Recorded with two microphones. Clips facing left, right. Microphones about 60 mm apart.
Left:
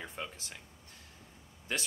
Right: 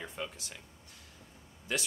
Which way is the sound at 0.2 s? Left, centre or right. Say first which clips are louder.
Right 3 dB; left.